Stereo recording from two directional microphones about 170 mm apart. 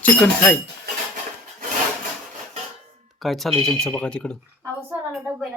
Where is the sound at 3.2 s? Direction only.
Centre (ahead or behind).